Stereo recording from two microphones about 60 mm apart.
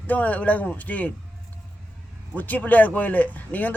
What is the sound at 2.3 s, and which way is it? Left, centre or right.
Speech, left.